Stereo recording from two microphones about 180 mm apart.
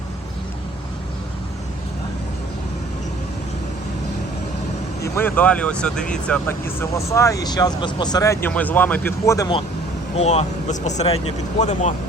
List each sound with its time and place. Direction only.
5.0 s speech: 10° left (ahead or behind)
10.2 s speech: 35° left (ahead or behind)